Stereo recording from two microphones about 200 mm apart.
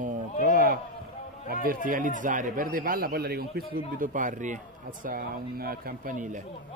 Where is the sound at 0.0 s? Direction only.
40° right (ahead or behind).